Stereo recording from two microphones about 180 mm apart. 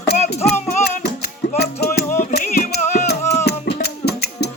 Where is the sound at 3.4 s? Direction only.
65° left (ahead or behind).